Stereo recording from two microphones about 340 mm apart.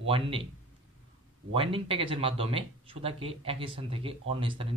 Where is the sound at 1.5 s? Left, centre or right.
Centre.